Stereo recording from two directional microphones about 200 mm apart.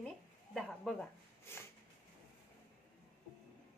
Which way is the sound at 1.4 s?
10° left (ahead or behind).